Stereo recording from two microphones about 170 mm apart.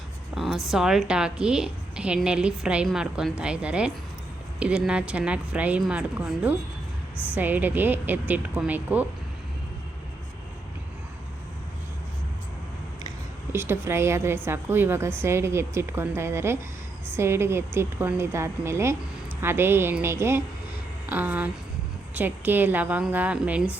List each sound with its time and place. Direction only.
0.3 s a woman's voice: centre (ahead or behind)
13.5 s speech: 15° right (ahead or behind)